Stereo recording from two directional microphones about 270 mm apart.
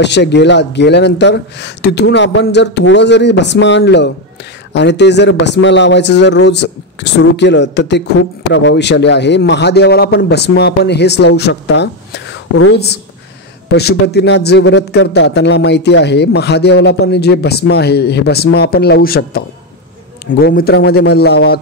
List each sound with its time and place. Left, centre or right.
0.0 s speech: left